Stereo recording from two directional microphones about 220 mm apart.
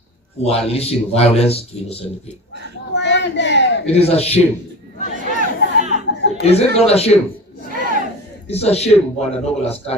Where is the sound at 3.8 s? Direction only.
25° left (ahead or behind).